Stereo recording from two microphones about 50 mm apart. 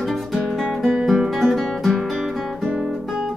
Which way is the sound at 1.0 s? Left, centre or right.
Centre.